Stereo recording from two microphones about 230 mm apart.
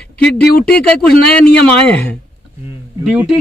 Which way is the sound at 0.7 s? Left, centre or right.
Centre.